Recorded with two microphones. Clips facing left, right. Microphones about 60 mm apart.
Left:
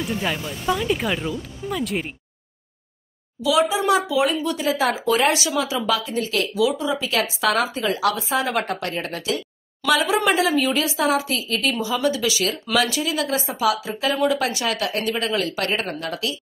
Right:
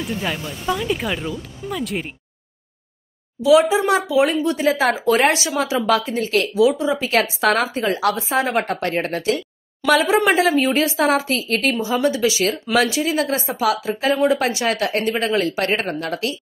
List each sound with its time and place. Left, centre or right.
0.0 s speech: centre
3.3 s speech: right
4.6 s speech: right
6.5 s speech: right
11.8 s speech: right